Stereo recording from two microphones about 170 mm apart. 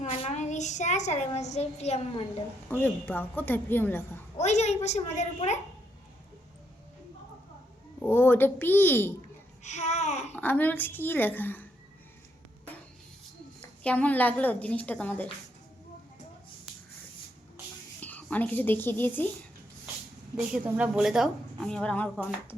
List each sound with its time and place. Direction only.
0.0 s a woman's voice: 40° left (ahead or behind)
2.6 s a woman's voice: 10° left (ahead or behind)
4.4 s a child's voice: 40° left (ahead or behind)
8.0 s a woman's voice: 15° left (ahead or behind)
9.6 s a sound: 45° left (ahead or behind)
10.3 s a woman's voice: 10° left (ahead or behind)
13.6 s a woman's voice: 10° left (ahead or behind)
18.0 s speech: 10° left (ahead or behind)
20.5 s a woman's voice: 5° right (ahead or behind)